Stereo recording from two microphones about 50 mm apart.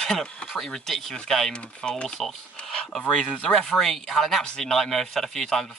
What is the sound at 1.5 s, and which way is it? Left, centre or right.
Speech, centre.